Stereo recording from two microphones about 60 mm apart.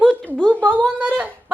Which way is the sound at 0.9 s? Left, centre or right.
Right.